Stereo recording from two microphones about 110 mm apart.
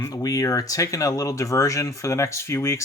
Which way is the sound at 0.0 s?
35° left (ahead or behind).